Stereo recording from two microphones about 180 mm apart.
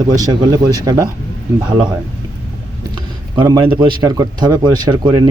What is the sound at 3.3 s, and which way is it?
Speech, 25° right (ahead or behind).